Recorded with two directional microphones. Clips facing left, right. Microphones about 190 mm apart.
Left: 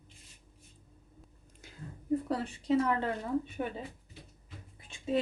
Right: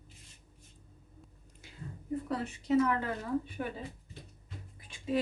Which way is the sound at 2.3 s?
30° left (ahead or behind).